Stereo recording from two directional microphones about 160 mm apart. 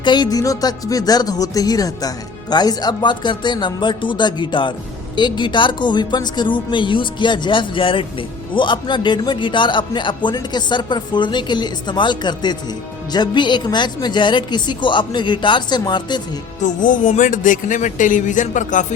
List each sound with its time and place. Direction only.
0.0 s speech: 25° left (ahead or behind)
16.6 s speech: 55° left (ahead or behind)